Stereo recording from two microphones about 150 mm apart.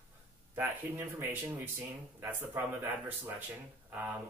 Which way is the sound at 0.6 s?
15° right (ahead or behind).